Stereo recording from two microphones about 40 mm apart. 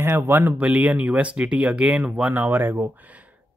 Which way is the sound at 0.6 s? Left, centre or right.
Right.